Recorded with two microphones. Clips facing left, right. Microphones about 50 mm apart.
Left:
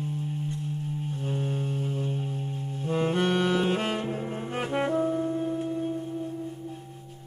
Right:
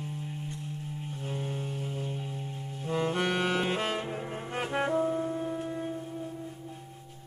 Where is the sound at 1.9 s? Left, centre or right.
Left.